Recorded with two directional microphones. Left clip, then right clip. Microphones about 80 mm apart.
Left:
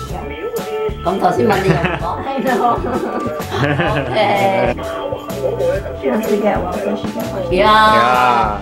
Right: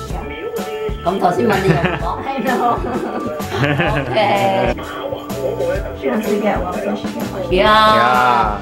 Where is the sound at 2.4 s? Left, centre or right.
Right.